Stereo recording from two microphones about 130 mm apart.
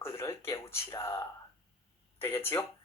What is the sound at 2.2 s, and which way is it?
Speech, 15° left (ahead or behind).